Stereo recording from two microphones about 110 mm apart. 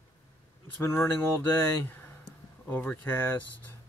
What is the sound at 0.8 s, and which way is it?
Speech, 25° left (ahead or behind).